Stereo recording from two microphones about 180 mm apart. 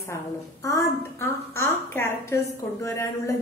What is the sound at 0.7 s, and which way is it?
A woman's voice, 15° left (ahead or behind).